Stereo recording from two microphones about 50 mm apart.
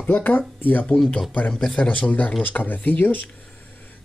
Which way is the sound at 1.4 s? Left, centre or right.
Centre.